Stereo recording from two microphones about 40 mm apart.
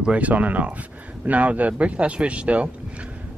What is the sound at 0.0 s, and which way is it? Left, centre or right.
Speech, right.